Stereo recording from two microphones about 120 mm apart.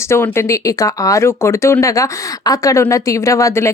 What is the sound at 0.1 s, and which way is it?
Speech, 20° left (ahead or behind).